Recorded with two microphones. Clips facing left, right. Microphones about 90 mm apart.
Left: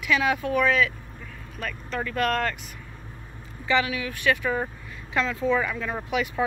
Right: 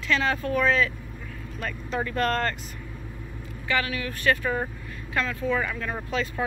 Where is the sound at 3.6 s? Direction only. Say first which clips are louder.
Left 3 dB; 15° left (ahead or behind).